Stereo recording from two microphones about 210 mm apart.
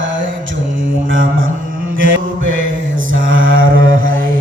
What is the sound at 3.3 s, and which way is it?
Mantra, 65° right (ahead or behind).